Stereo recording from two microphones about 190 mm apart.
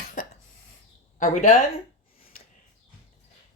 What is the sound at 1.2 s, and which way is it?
Speech, 40° left (ahead or behind).